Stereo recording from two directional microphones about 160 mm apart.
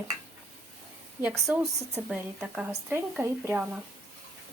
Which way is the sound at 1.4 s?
15° right (ahead or behind).